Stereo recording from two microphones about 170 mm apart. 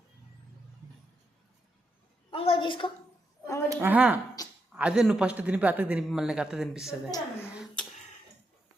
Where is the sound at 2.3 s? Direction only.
30° left (ahead or behind).